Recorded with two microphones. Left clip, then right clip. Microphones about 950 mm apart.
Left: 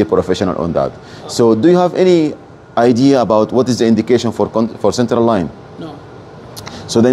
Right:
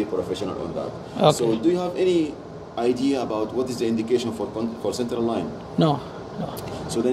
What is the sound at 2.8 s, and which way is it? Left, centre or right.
Speech, left.